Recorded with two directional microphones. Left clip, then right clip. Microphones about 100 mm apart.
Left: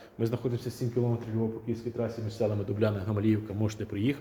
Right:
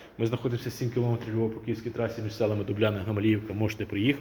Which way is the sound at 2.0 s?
10° left (ahead or behind).